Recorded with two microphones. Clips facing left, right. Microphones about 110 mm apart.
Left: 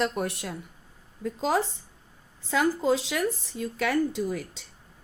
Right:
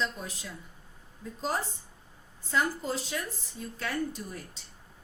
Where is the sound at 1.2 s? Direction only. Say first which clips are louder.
Left 7 dB; 90° left.